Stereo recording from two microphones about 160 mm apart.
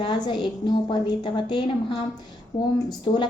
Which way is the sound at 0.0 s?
25° left (ahead or behind).